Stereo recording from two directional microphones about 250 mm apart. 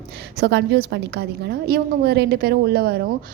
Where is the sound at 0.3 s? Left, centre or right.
Right.